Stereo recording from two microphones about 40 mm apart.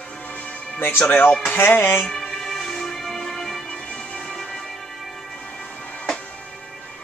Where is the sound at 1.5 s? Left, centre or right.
Left.